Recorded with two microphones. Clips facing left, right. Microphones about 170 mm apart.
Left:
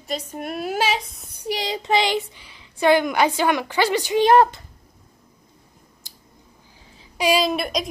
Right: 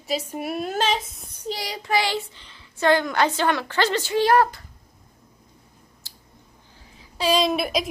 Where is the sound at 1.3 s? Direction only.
15° left (ahead or behind).